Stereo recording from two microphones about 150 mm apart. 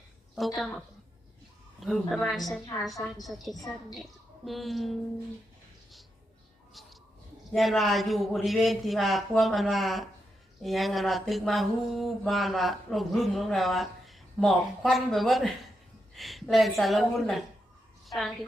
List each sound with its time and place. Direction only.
0.3 s speech: centre (ahead or behind)
7.5 s speech: centre (ahead or behind)